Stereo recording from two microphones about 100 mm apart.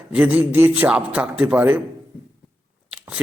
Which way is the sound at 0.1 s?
15° right (ahead or behind).